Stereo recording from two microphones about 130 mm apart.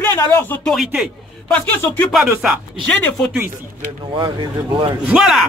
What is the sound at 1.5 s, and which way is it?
Speech, 15° left (ahead or behind).